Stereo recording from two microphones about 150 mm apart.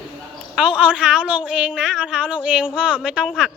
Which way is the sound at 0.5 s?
5° right (ahead or behind).